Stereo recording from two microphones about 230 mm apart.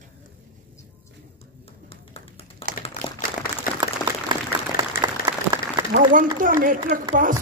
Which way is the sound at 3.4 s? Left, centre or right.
Left.